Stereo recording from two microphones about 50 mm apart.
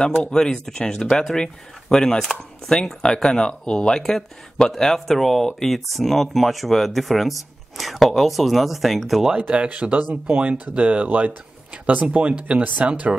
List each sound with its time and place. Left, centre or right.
0.2 s speech: centre
9.3 s speech: right